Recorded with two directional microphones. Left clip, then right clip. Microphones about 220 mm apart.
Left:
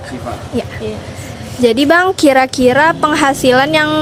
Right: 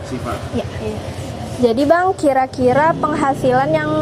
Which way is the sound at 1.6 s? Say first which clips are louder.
Left 4 dB; 30° left (ahead or behind).